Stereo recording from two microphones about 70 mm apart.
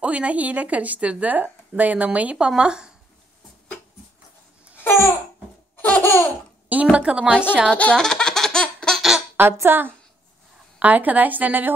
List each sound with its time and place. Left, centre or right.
0.0 s speech: centre
5.8 s laughter: left
6.7 s a sound: right
7.7 s speech: centre
8.0 s baby laughter: centre
9.4 s a woman's voice: right